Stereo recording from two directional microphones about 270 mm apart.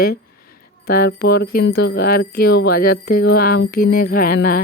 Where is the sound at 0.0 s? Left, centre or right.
Left.